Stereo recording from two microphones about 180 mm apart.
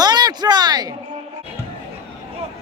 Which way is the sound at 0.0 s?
25° right (ahead or behind).